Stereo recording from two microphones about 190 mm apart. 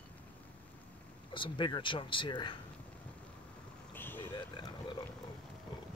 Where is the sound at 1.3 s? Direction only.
25° left (ahead or behind).